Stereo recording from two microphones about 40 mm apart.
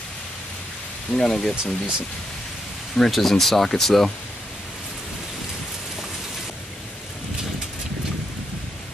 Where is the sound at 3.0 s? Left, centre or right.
Centre.